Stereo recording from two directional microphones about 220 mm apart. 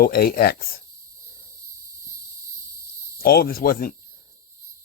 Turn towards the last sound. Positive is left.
turn(degrees=40)  # may be behind; listen again after turning